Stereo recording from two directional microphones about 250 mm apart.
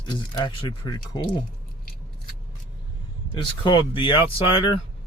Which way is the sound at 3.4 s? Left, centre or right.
Centre.